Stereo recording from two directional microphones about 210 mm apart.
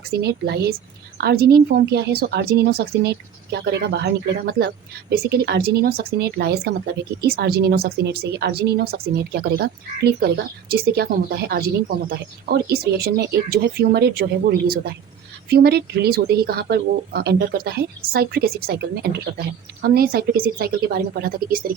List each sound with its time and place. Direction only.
0.1 s a woman's voice: 50° right (ahead or behind)